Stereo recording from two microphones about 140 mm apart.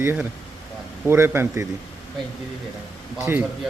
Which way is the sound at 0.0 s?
15° right (ahead or behind).